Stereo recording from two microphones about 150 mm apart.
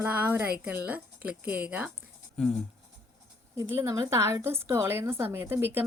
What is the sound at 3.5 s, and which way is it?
A woman's voice, 15° right (ahead or behind).